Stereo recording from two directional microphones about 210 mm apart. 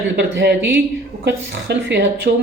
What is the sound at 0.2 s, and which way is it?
Speech, 55° right (ahead or behind).